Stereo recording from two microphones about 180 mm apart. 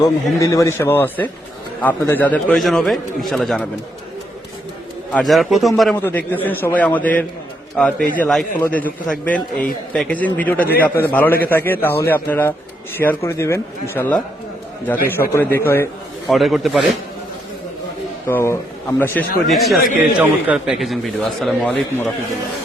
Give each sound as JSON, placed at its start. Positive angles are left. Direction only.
{"t": 0.3, "sound": "a man's voice", "side_deg": 15}
{"t": 5.1, "sound": "a man's voice", "side_deg": 0}
{"t": 6.0, "sound": "a man's voice", "side_deg": 10}
{"t": 14.9, "sound": "speech", "side_deg": 55}
{"t": 15.5, "sound": "a man's voice", "side_deg": 15}
{"t": 16.3, "sound": "a man's voice", "side_deg": 0}
{"t": 18.3, "sound": "a man's voice", "side_deg": 10}
{"t": 19.5, "sound": "a man's voice", "side_deg": 0}